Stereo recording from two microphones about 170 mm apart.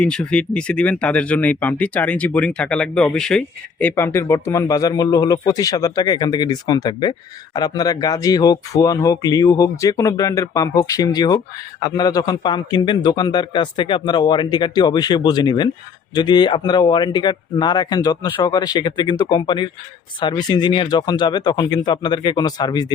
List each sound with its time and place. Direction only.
0.0 s speech: 5° left (ahead or behind); by 22.9 s 25° left (ahead or behind)